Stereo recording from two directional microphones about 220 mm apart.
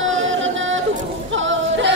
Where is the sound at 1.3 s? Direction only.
60° right (ahead or behind).